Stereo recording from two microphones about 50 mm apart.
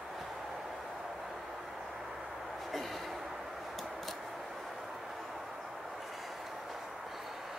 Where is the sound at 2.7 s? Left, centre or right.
Centre.